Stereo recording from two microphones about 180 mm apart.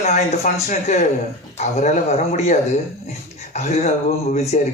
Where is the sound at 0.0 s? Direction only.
40° left (ahead or behind).